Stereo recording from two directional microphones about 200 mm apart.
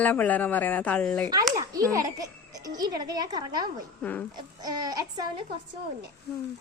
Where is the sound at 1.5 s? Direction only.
15° right (ahead or behind).